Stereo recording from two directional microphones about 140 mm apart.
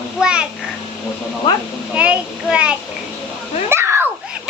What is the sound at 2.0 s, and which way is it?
Speech, 10° right (ahead or behind).